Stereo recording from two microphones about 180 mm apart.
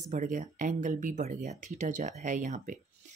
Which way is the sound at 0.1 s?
45° right (ahead or behind).